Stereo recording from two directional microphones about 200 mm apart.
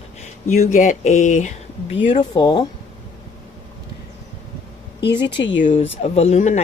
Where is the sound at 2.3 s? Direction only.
20° left (ahead or behind).